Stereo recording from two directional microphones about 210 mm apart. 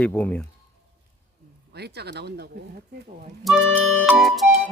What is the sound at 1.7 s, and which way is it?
Speech, 50° right (ahead or behind).